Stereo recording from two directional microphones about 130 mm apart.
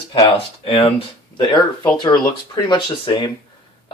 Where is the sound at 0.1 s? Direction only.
45° left (ahead or behind).